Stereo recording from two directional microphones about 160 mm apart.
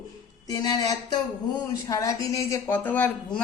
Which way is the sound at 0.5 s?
25° left (ahead or behind).